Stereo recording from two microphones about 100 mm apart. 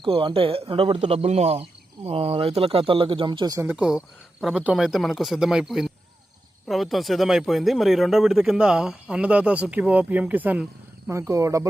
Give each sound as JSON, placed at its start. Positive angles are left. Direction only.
{"t": 0.0, "sound": "a man's voice", "side_deg": -60}
{"t": 2.0, "sound": "speech", "side_deg": -75}
{"t": 3.7, "sound": "speech", "side_deg": -10}
{"t": 11.1, "sound": "speech", "side_deg": -30}